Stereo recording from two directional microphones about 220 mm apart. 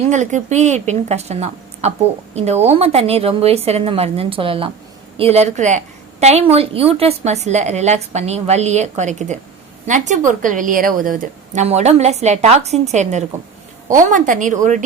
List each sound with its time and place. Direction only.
0.1 s a woman's voice: 35° right (ahead or behind)